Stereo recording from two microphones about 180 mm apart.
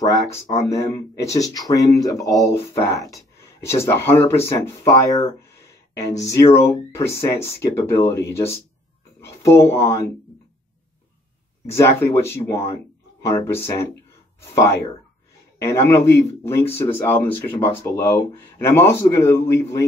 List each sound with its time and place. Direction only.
0.6 s speech: 15° left (ahead or behind)
11.6 s speech: 15° left (ahead or behind)